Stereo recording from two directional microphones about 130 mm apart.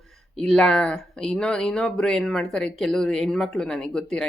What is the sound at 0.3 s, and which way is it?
Speech, 5° left (ahead or behind).